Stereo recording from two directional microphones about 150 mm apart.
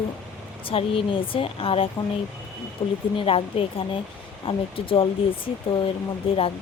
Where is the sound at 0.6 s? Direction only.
35° left (ahead or behind).